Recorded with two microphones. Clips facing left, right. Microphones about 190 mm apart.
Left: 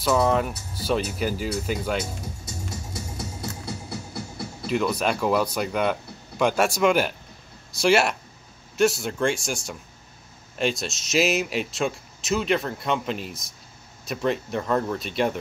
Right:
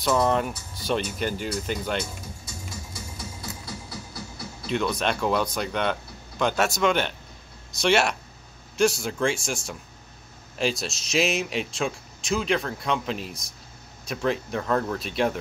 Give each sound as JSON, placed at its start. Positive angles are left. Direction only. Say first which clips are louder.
{"t": 0.0, "sound": "speech", "louder": "left 1 dB", "side_deg": 5}
{"t": 2.9, "sound": "music", "louder": "left 4 dB", "side_deg": 65}
{"t": 3.9, "sound": "music", "louder": "left 4 dB", "side_deg": 25}
{"t": 4.6, "sound": "speech", "louder": "left 2 dB", "side_deg": 5}